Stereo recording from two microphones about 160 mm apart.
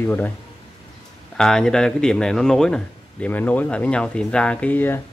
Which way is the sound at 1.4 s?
5° left (ahead or behind).